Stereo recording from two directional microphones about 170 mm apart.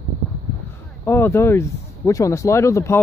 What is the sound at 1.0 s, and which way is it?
Speech, 15° left (ahead or behind).